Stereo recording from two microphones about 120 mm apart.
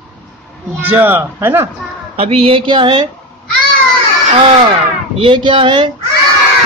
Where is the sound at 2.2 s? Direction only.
55° right (ahead or behind); by 3.1 s 40° right (ahead or behind).